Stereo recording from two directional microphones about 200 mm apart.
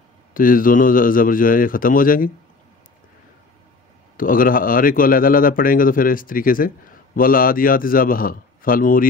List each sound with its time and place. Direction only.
0.3 s a man's voice: 45° left (ahead or behind)
4.2 s a man's voice: 45° left (ahead or behind)